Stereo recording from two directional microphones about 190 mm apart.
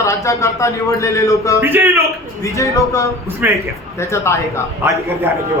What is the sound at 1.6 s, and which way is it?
Speech, 10° right (ahead or behind).